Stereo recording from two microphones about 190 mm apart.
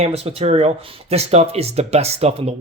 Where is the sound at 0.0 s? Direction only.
30° right (ahead or behind).